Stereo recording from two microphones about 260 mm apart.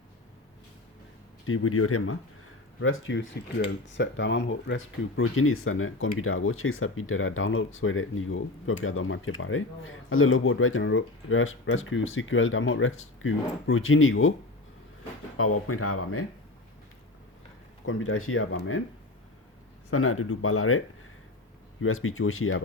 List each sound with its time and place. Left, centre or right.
1.5 s speech: left
15.4 s speech: left
17.8 s speech: left
19.9 s speech: left